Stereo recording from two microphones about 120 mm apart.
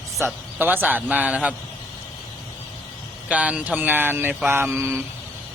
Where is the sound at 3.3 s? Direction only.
10° right (ahead or behind).